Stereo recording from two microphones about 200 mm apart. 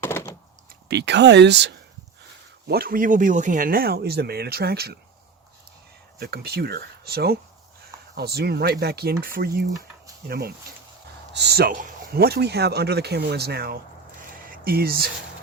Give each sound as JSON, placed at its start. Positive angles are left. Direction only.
{"t": 0.0, "sound": "a sound", "side_deg": 10}
{"t": 0.9, "sound": "speech", "side_deg": -60}
{"t": 6.1, "sound": "speech", "side_deg": -50}